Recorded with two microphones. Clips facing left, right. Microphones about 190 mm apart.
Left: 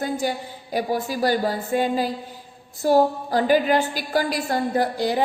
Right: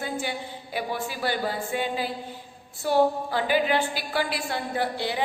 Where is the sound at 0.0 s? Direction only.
40° left (ahead or behind).